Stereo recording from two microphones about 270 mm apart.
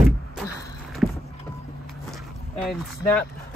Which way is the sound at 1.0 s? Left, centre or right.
Centre.